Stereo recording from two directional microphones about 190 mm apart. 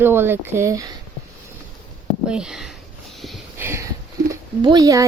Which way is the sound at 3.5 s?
15° right (ahead or behind).